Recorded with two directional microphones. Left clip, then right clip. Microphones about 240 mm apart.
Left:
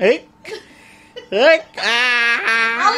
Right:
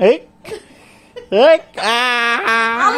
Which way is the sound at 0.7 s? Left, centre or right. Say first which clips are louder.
Right 1 dB; centre.